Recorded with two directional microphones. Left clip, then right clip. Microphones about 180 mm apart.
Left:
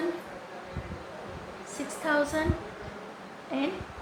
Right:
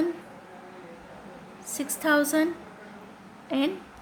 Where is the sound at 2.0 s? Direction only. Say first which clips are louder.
Right 4 dB; 55° right (ahead or behind).